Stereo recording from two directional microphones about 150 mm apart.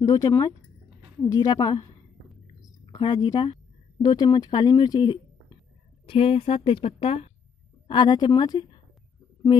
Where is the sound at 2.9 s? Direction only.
30° left (ahead or behind).